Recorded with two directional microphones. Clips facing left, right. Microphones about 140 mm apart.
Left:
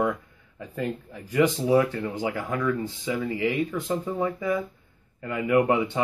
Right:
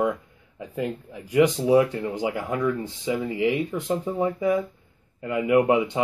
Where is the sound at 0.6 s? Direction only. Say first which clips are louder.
Right 1 dB; 15° right (ahead or behind).